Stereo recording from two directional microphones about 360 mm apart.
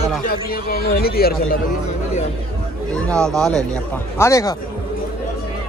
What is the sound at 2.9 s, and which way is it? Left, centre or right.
Speech, centre.